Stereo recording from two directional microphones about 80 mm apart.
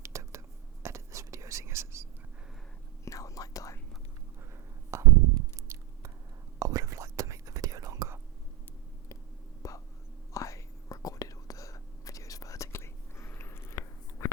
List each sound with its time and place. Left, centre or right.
0.0 s whispering: right
3.0 s whispering: left
4.9 s a sound: right
5.7 s chewing: right
6.6 s whispering: right
9.6 s whispering: left